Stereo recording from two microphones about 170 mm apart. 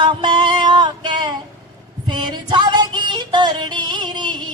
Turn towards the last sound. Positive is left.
turn(degrees=-25)  # may be behind; listen again after turning